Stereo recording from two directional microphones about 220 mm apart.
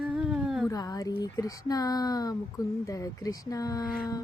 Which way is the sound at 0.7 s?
15° left (ahead or behind).